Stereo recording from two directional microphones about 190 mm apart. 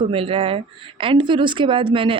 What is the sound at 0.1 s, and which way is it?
Speech, 25° right (ahead or behind).